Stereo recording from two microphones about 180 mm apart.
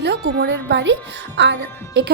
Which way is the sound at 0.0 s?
70° right (ahead or behind).